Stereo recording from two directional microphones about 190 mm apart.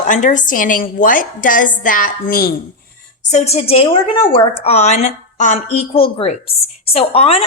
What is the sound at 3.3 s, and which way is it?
A woman's voice, 35° left (ahead or behind).